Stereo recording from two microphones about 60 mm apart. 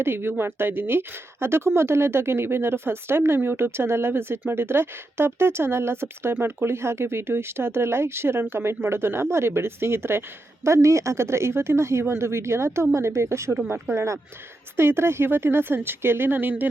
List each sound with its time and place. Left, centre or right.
0.0 s speech: right